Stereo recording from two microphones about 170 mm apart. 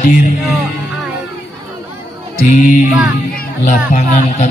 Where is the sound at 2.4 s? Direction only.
50° left (ahead or behind).